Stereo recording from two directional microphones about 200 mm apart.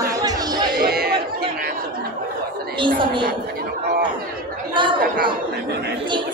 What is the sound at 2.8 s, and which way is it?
Speech, 25° right (ahead or behind).